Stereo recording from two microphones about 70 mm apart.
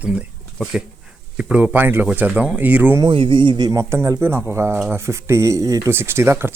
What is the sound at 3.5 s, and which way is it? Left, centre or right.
Speech, right.